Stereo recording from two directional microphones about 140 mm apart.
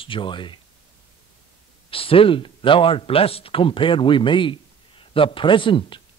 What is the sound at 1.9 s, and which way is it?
A man's voice, 40° left (ahead or behind).